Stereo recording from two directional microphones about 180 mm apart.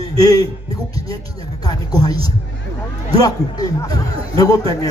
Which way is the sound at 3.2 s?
20° left (ahead or behind).